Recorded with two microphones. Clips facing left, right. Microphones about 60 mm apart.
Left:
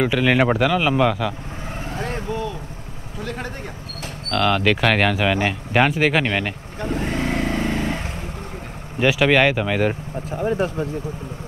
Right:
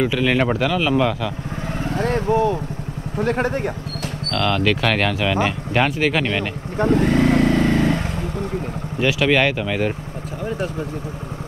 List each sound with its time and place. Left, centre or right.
0.0 s speech: centre
2.0 s vehicle: right
3.2 s speech: right
4.3 s speech: centre
6.8 s speech: right
7.2 s vehicle: right
7.5 s vehicle: centre
9.0 s speech: centre